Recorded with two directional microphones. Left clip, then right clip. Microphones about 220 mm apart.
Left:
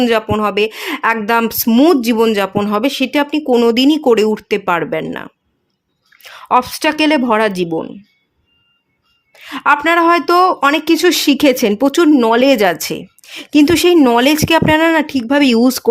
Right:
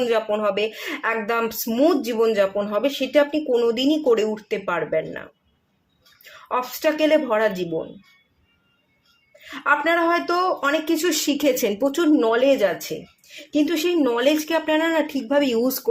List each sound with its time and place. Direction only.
0.0 s speech: 45° left (ahead or behind)
9.4 s speech: 50° left (ahead or behind); by 15.8 s 35° left (ahead or behind)